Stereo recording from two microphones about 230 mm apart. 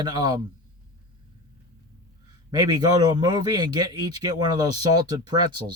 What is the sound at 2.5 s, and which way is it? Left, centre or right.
Speech, centre.